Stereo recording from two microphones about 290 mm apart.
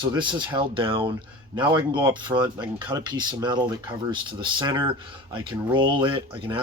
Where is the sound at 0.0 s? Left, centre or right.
Centre.